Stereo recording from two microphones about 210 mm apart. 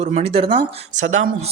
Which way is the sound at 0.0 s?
30° right (ahead or behind).